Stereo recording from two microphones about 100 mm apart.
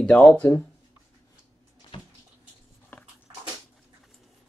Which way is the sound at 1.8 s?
55° left (ahead or behind).